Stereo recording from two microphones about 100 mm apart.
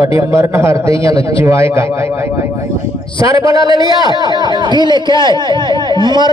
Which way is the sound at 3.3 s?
40° right (ahead or behind).